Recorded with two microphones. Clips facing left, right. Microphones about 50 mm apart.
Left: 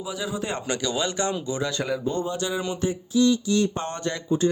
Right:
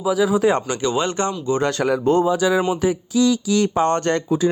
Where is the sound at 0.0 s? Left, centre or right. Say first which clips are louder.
Right 13 dB; right.